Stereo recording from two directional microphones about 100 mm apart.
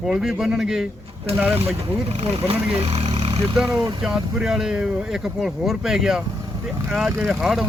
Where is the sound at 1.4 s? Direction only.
15° right (ahead or behind).